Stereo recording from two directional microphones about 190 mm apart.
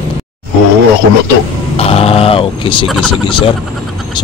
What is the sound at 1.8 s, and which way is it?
Speech, 30° left (ahead or behind).